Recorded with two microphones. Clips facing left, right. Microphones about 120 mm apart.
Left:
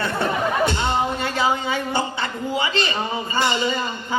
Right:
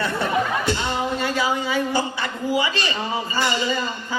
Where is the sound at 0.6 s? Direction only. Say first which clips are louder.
Left 3 dB; 25° left (ahead or behind).